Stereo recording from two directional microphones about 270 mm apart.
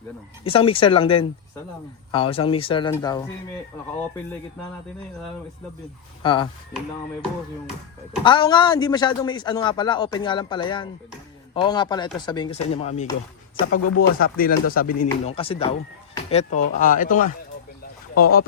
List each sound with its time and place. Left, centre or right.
0.4 s a man's voice: centre
6.2 s a man's voice: centre
8.2 s a man's voice: centre
13.6 s speech: left
14.2 s speech: left